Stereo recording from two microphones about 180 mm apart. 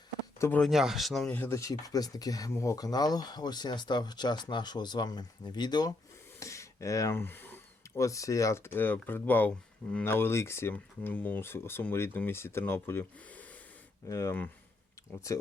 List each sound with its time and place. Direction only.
0.3 s speech: 15° left (ahead or behind)
0.6 s speech: centre (ahead or behind)
1.4 s speech: 15° left (ahead or behind)